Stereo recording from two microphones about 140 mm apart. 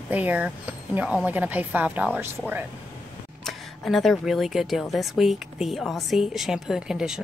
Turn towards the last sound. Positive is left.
turn(degrees=-5)  # may be behind; listen again after turning